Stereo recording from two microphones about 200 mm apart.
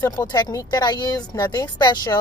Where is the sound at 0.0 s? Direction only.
20° left (ahead or behind).